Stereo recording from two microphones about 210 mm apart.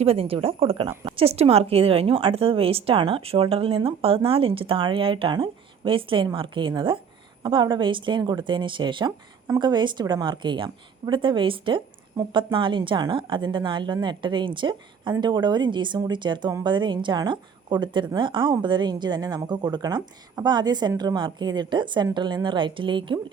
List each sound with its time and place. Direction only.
0.0 s a woman's voice: 25° right (ahead or behind)